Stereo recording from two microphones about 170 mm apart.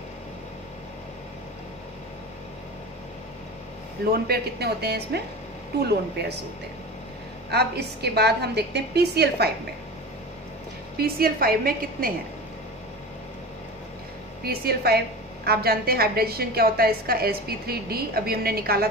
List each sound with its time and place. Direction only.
4.1 s a woman's voice: 70° right (ahead or behind)
7.5 s a woman's voice: 70° right (ahead or behind)
11.0 s a woman's voice: 65° right (ahead or behind)
14.4 s a woman's voice: 65° right (ahead or behind)